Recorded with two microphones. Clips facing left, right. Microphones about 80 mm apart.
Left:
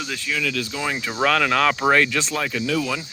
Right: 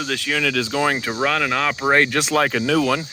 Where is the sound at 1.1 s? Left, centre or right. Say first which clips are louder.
Left 1 dB; centre.